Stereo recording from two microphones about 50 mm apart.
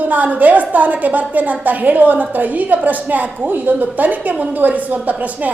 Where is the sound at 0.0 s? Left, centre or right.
Right.